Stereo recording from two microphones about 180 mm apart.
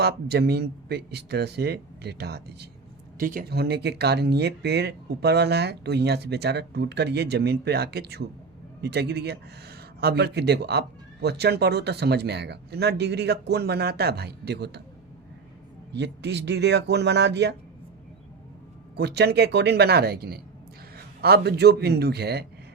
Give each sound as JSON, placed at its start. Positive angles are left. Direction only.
{"t": 0.0, "sound": "speech", "side_deg": -65}
{"t": 3.2, "sound": "speech", "side_deg": -50}
{"t": 15.9, "sound": "speech", "side_deg": -75}
{"t": 18.9, "sound": "a man's voice", "side_deg": -65}